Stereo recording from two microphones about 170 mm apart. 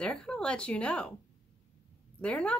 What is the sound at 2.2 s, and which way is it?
Speech, 5° left (ahead or behind).